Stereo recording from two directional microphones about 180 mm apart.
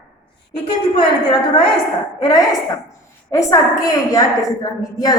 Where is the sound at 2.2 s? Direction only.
20° left (ahead or behind).